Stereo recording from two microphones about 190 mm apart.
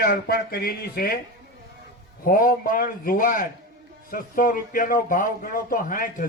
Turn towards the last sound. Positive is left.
turn(degrees=45)  # may be behind; listen again after turning